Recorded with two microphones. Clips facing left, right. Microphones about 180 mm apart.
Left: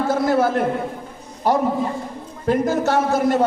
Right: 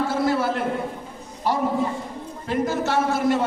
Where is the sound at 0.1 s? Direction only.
45° left (ahead or behind).